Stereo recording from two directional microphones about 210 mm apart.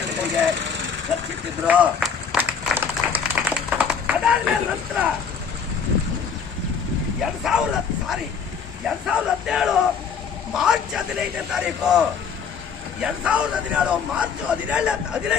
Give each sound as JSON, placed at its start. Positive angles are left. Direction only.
{"t": 0.2, "sound": "lawn mower", "side_deg": 0}
{"t": 0.5, "sound": "lawn mower", "side_deg": -60}
{"t": 1.6, "sound": "run", "side_deg": -5}
{"t": 7.2, "sound": "a man's voice", "side_deg": 0}